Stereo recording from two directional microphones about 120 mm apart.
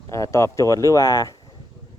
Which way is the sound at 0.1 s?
25° left (ahead or behind).